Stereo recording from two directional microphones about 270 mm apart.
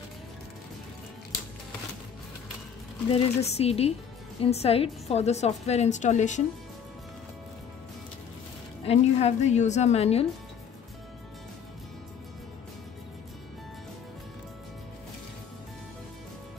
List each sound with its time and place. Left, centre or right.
3.1 s a woman's voice: left
8.8 s a woman's voice: left